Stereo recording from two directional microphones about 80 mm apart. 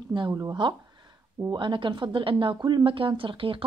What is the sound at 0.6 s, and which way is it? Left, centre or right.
Speech, right.